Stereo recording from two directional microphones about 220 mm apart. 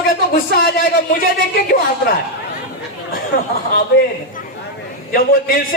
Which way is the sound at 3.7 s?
40° left (ahead or behind).